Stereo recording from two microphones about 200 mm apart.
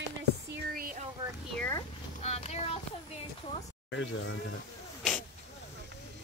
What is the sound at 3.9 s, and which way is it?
Speech, 70° left (ahead or behind).